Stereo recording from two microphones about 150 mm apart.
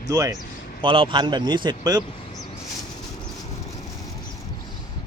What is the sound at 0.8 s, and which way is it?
Speech, 35° right (ahead or behind).